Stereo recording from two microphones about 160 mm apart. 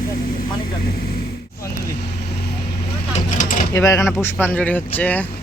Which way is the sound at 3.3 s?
55° left (ahead or behind).